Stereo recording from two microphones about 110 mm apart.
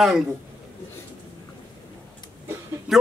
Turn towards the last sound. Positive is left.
turn(degrees=-5)  # may be behind; listen again after turning